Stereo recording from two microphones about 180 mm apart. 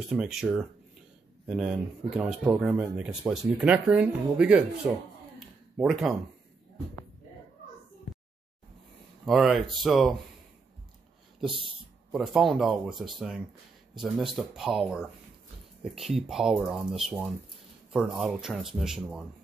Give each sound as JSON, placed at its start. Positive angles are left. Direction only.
{"t": 0.1, "sound": "speech", "side_deg": -5}
{"t": 5.4, "sound": "a sound", "side_deg": 0}
{"t": 9.2, "sound": "speech", "side_deg": 0}
{"t": 12.1, "sound": "speech", "side_deg": 0}